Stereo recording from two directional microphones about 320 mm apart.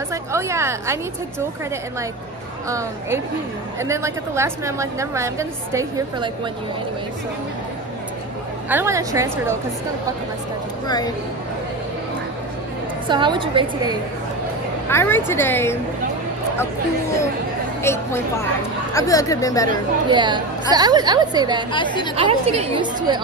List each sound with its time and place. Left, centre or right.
0.1 s a woman's voice: centre
3.8 s a woman's voice: centre
8.6 s a woman's voice: centre
13.1 s a woman's voice: centre
14.9 s a woman's voice: centre
17.8 s a woman's voice: centre
20.1 s a woman's voice: centre
21.7 s a woman's voice: centre
22.1 s a woman's voice: centre